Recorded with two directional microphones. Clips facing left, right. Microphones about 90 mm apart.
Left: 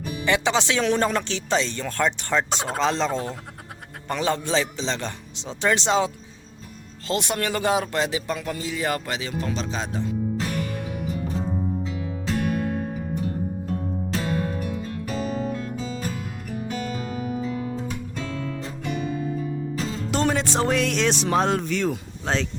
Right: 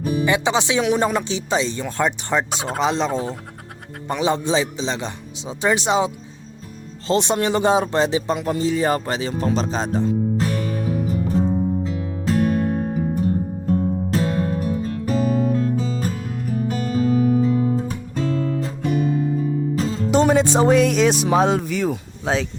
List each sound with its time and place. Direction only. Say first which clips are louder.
0.0 s music: right 10 dB; 40° right (ahead or behind)
0.3 s speech: even; 15° right (ahead or behind)
7.1 s speech: right 6 dB; 25° right (ahead or behind)
11.8 s music: right 4 dB; 40° right (ahead or behind)
20.1 s speech: right 8 dB; 15° right (ahead or behind)